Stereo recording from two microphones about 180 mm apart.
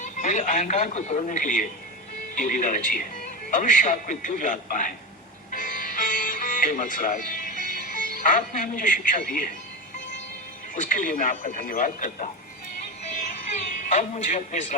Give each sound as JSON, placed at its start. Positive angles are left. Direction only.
{"t": 0.0, "sound": "speech", "side_deg": 45}
{"t": 5.5, "sound": "music", "side_deg": 45}
{"t": 10.8, "sound": "speech", "side_deg": 45}
{"t": 13.8, "sound": "speech", "side_deg": 40}